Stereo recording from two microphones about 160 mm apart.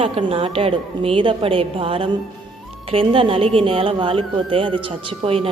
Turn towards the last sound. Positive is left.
turn(degrees=-35)  # may be behind; listen again after turning